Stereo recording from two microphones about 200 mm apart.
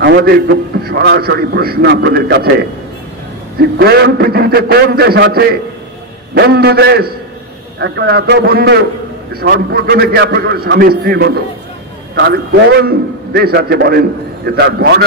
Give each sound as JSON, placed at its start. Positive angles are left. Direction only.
{"t": 0.0, "sound": "a man's voice", "side_deg": -55}
{"t": 3.7, "sound": "a man's voice", "side_deg": -55}